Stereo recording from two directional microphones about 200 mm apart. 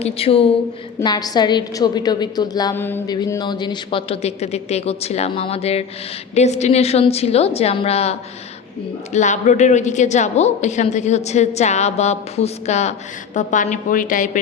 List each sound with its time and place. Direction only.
0.0 s a woman's voice: 30° left (ahead or behind)
9.1 s a woman's voice: 35° left (ahead or behind)